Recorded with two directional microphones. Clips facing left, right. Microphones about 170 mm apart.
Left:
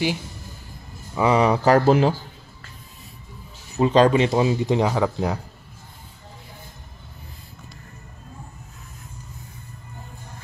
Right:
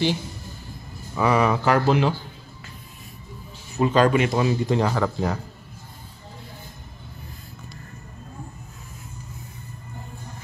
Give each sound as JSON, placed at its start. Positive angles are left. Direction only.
{"t": 1.1, "sound": "speech", "side_deg": 25}
{"t": 1.6, "sound": "speech", "side_deg": 40}
{"t": 3.7, "sound": "speech", "side_deg": 25}
{"t": 4.8, "sound": "speech", "side_deg": 5}